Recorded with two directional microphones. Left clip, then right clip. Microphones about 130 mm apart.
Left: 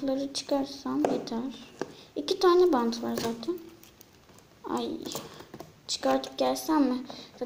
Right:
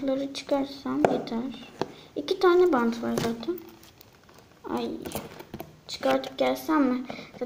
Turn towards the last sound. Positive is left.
turn(degrees=20)  # may be behind; listen again after turning